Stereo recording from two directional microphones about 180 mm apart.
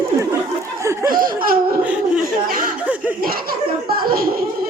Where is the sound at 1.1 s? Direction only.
50° right (ahead or behind).